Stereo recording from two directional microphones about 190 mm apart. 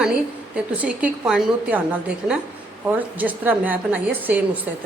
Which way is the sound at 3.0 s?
10° right (ahead or behind).